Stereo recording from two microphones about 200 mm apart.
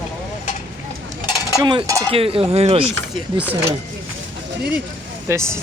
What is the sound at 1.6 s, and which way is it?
Speech, 20° right (ahead or behind).